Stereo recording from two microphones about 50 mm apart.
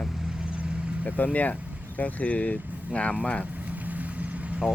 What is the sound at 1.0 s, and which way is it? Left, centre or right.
Speech, left.